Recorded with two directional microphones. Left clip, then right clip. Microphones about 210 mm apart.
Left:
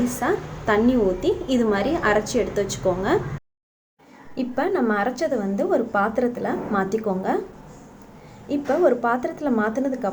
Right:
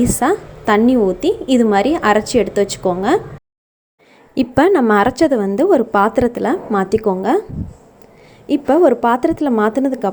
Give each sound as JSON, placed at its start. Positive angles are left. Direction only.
{"t": 0.0, "sound": "a woman's voice", "side_deg": -40}
{"t": 4.4, "sound": "a woman's voice", "side_deg": -45}
{"t": 8.4, "sound": "a woman's voice", "side_deg": -40}